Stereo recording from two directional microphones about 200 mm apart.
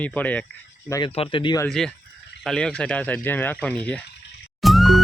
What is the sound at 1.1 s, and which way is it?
Speech, 25° left (ahead or behind).